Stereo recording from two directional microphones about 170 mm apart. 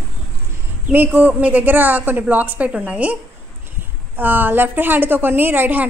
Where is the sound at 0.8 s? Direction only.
10° right (ahead or behind).